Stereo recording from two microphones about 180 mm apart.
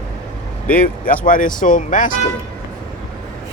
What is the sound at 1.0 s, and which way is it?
Speech, 50° left (ahead or behind).